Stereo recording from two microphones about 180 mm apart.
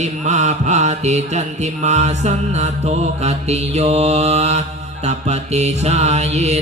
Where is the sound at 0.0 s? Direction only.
40° right (ahead or behind).